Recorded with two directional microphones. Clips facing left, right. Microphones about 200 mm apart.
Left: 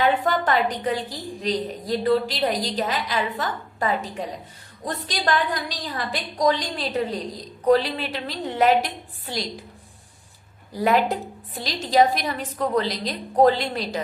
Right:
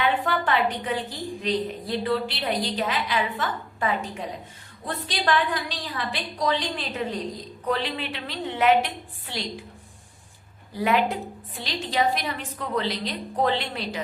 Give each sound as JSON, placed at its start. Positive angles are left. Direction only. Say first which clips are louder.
{"t": 0.0, "sound": "a woman's voice", "louder": "left 3 dB", "side_deg": 40}
{"t": 10.8, "sound": "a woman's voice", "louder": "left 2 dB", "side_deg": 40}